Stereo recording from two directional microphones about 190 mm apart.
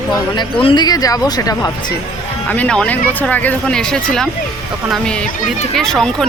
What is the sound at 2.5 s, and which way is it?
Speech, 5° left (ahead or behind).